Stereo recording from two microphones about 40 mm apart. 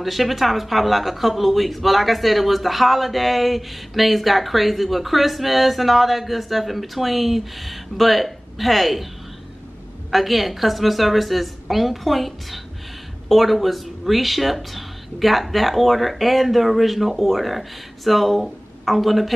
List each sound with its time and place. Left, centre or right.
0.0 s speech: centre
10.1 s speech: centre